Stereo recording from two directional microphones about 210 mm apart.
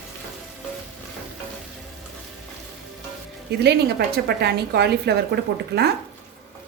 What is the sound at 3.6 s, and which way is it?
A woman's voice, 50° right (ahead or behind).